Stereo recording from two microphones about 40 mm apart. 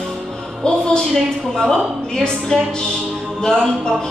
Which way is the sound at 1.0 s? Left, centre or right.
Centre.